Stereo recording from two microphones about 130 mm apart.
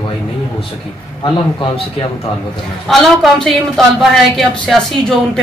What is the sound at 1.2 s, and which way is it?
Speech, 40° left (ahead or behind).